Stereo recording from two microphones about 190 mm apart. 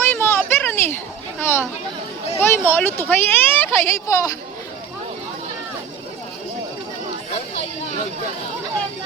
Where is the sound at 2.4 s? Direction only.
10° left (ahead or behind).